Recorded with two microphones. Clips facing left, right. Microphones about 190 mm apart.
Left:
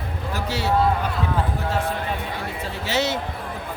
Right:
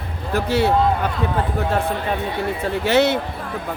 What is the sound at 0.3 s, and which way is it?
Speech, 55° right (ahead or behind).